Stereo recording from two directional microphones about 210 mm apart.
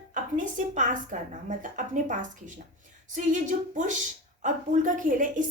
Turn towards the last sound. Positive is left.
turn(degrees=-40)  # may be behind; listen again after turning